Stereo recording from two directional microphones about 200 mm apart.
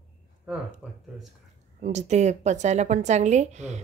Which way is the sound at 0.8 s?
5° right (ahead or behind).